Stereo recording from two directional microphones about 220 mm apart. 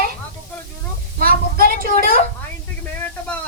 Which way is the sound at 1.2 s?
40° right (ahead or behind).